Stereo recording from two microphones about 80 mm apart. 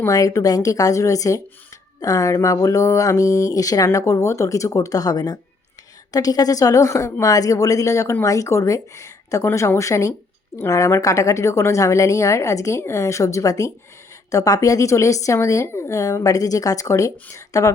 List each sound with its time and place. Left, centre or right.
0.1 s a woman's voice: left